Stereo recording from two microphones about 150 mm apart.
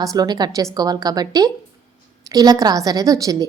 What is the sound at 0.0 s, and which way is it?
A woman's voice, 25° right (ahead or behind).